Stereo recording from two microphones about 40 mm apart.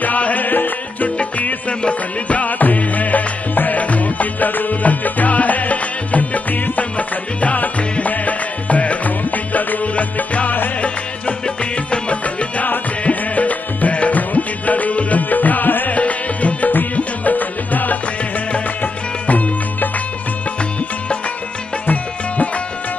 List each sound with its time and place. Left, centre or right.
0.0 s music: left
1.4 s music: left
11.4 s music: left
15.9 s music: left
21.8 s music: left